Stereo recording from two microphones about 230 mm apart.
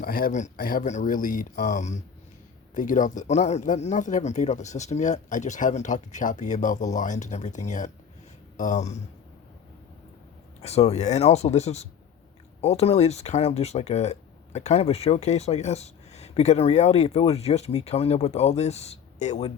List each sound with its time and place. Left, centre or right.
0.0 s speech: left
10.6 s speech: left